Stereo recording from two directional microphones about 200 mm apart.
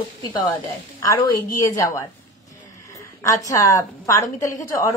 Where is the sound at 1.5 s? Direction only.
15° left (ahead or behind).